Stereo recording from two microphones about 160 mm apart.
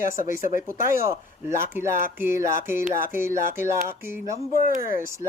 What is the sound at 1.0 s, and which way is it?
Speech, 15° right (ahead or behind).